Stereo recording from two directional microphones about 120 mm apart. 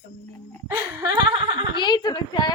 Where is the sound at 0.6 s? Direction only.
30° right (ahead or behind).